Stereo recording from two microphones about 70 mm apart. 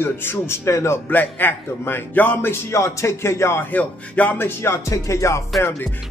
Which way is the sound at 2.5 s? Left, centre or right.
Left.